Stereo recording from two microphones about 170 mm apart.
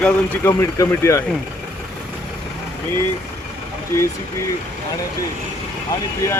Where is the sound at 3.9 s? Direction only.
15° left (ahead or behind).